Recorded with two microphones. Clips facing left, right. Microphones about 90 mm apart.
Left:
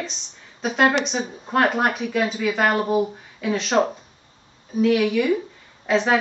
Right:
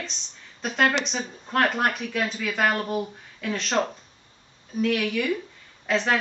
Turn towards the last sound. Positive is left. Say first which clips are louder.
# left 4 dB
turn(degrees=5)  # may be behind; listen again after turning